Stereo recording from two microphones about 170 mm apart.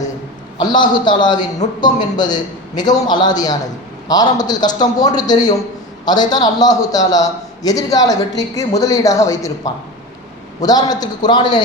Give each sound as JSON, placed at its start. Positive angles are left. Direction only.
{"t": 0.6, "sound": "a man's voice", "side_deg": 25}